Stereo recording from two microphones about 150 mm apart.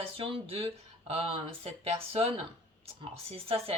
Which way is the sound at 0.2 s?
35° right (ahead or behind).